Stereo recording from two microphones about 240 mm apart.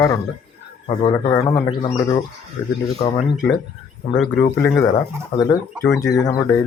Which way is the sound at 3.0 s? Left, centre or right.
Left.